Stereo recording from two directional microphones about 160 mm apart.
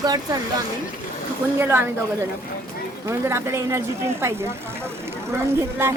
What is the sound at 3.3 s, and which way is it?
Speech, 15° right (ahead or behind).